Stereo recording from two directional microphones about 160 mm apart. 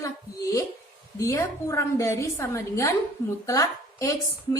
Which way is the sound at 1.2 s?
20° left (ahead or behind).